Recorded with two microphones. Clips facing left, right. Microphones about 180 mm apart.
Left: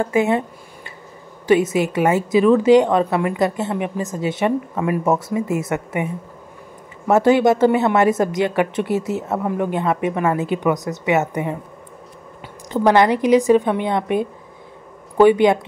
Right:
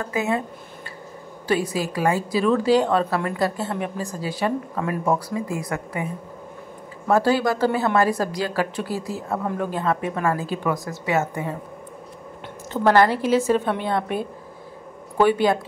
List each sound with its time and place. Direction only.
0.0 s a woman's voice: 25° left (ahead or behind)
1.5 s a woman's voice: 20° left (ahead or behind)
7.1 s a woman's voice: 20° left (ahead or behind)
12.7 s a woman's voice: 15° left (ahead or behind)